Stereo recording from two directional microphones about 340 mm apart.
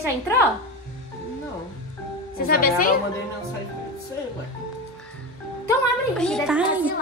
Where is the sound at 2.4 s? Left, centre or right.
Left.